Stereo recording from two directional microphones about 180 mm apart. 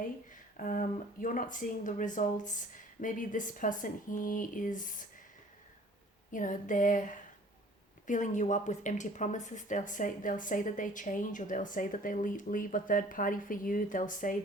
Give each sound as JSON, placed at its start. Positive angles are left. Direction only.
{"t": 0.3, "sound": "speech", "side_deg": 45}
{"t": 6.3, "sound": "speech", "side_deg": 45}